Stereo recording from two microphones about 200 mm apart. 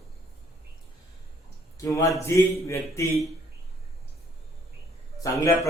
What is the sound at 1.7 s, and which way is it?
A man's voice, 15° left (ahead or behind).